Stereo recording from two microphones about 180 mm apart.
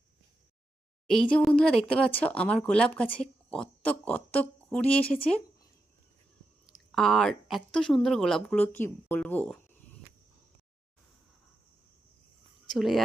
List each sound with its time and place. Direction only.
1.0 s speech: centre (ahead or behind)
4.9 s speech: 30° left (ahead or behind)
6.7 s speech: centre (ahead or behind)
12.7 s speech: centre (ahead or behind)